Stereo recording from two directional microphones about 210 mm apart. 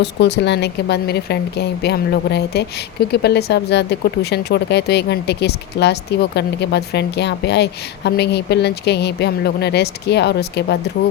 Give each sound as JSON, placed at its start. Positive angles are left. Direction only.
{"t": 0.0, "sound": "speech", "side_deg": 55}